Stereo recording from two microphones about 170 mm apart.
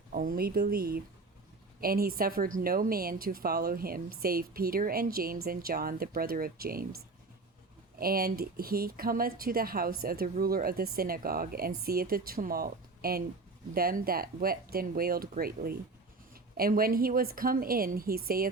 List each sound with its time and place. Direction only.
0.1 s speech: 55° right (ahead or behind)
7.9 s speech: 60° right (ahead or behind)